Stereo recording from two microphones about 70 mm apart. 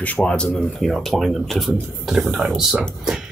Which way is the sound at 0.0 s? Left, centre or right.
Left.